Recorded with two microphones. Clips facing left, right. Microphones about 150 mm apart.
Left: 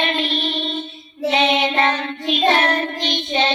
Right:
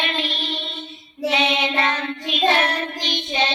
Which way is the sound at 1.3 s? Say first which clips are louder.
Left 4 dB; 45° left (ahead or behind).